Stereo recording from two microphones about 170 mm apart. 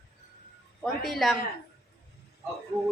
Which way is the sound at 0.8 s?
Centre (ahead or behind).